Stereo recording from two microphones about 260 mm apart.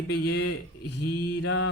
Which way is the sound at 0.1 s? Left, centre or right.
Left.